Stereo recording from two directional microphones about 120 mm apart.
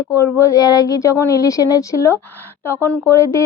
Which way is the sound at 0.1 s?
25° left (ahead or behind).